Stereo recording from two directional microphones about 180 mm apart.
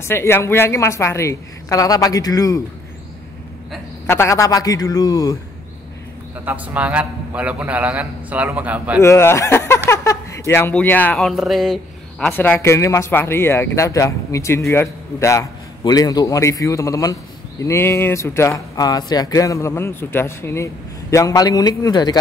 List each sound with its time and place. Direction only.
0.0 s speech: 15° left (ahead or behind)
4.1 s speech: 15° left (ahead or behind)
6.4 s a man's voice: 10° right (ahead or behind)
9.0 s speech: 15° left (ahead or behind)